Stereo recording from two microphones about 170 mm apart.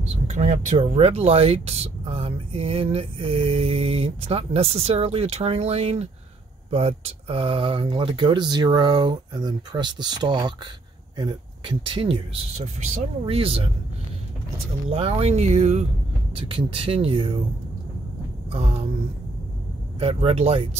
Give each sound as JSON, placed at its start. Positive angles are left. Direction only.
{"t": 0.3, "sound": "speech", "side_deg": -45}
{"t": 14.9, "sound": "speech", "side_deg": -35}
{"t": 16.3, "sound": "speech", "side_deg": -30}
{"t": 18.5, "sound": "a sound", "side_deg": -35}
{"t": 20.0, "sound": "speech", "side_deg": -35}